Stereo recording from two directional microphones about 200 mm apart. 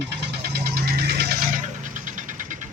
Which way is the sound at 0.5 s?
50° right (ahead or behind).